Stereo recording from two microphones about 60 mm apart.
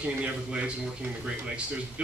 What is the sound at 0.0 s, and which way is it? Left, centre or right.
Speech, centre.